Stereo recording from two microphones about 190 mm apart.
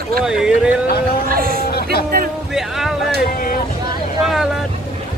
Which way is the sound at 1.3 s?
50° right (ahead or behind).